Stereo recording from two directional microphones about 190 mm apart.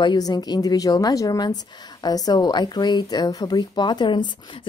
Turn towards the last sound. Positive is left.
turn(degrees=25)  # may be behind; listen again after turning